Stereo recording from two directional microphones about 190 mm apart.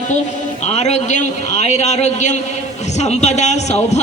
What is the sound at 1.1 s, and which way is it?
A man's voice, 35° left (ahead or behind).